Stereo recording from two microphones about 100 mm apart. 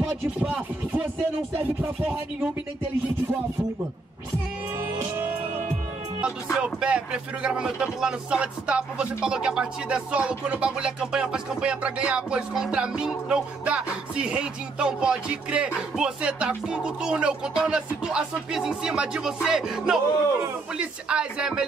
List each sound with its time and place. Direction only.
0.4 s speech: 15° right (ahead or behind)
4.9 s music: 25° right (ahead or behind)
6.2 s speech: 10° right (ahead or behind)